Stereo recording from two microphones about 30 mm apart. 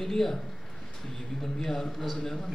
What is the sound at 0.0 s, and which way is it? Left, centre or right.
Speech, centre.